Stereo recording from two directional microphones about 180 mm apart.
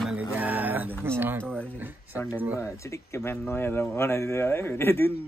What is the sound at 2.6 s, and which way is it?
Speech, 15° left (ahead or behind).